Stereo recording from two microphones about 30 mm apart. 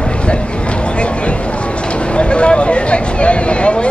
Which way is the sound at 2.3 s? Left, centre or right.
Left.